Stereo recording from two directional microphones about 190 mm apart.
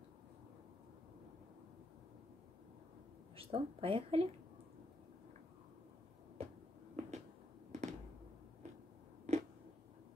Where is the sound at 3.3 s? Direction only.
30° right (ahead or behind).